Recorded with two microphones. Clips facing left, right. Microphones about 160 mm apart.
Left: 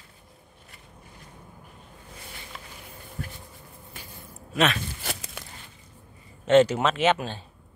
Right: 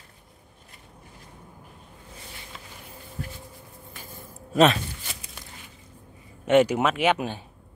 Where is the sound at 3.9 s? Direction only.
45° right (ahead or behind).